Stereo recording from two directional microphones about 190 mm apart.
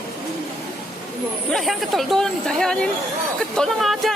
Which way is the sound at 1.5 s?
Centre (ahead or behind).